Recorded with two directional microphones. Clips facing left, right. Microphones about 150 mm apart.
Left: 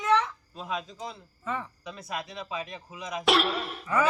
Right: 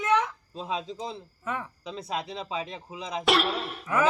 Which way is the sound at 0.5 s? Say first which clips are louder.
Right 2 dB; 30° right (ahead or behind).